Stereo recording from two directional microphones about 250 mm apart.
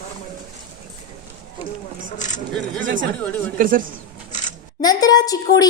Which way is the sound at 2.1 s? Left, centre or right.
Left.